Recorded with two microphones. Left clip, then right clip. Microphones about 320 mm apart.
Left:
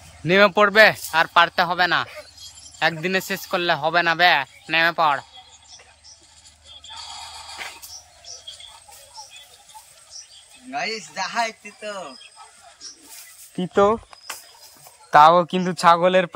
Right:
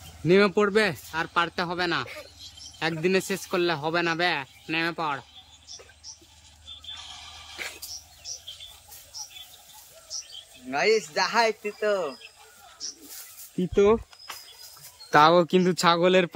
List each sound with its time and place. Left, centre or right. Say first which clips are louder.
0.2 s speech: left 6 dB; centre
10.7 s speech: right 4 dB; centre
15.0 s speech: left 5 dB; centre